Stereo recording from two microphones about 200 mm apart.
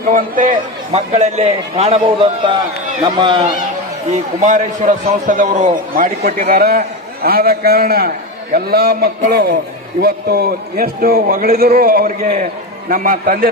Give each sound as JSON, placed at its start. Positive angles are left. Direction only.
{"t": 0.1, "sound": "a man's voice", "side_deg": -40}
{"t": 3.0, "sound": "a man's voice", "side_deg": -20}
{"t": 4.1, "sound": "a man's voice", "side_deg": -35}